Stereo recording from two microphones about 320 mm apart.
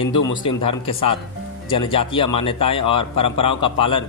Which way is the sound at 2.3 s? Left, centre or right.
Centre.